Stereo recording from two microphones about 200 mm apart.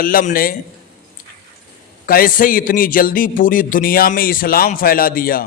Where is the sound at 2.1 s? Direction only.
45° left (ahead or behind).